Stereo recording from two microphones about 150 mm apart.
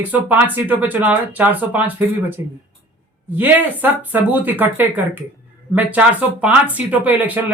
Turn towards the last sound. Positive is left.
turn(degrees=-10)  # may be behind; listen again after turning